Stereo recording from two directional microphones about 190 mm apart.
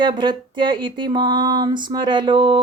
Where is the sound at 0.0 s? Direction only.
25° right (ahead or behind).